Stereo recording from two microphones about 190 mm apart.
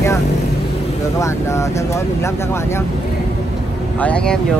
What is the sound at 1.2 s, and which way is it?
Speech, 15° left (ahead or behind).